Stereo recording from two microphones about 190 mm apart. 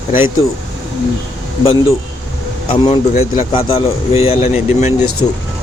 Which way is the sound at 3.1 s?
40° left (ahead or behind).